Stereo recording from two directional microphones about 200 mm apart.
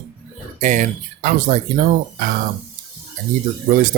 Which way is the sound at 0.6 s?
40° right (ahead or behind).